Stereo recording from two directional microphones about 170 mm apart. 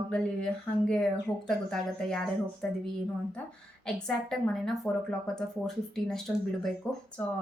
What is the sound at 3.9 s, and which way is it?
A woman's voice, 5° left (ahead or behind).